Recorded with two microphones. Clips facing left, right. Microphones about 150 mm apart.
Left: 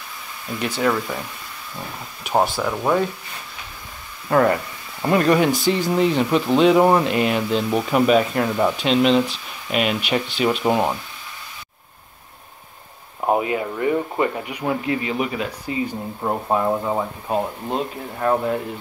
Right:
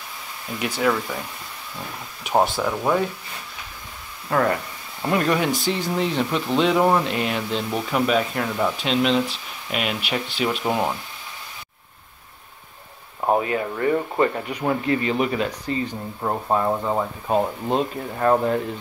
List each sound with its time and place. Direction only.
0.6 s speech: 10° right (ahead or behind)
2.5 s speech: 5° left (ahead or behind)
4.3 s speech: 5° left (ahead or behind)
10.6 s speech: 15° left (ahead or behind)
13.3 s speech: 20° left (ahead or behind); by 18.6 s centre (ahead or behind)